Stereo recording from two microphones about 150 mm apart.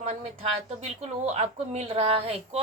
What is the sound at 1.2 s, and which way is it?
A woman's voice, 45° right (ahead or behind).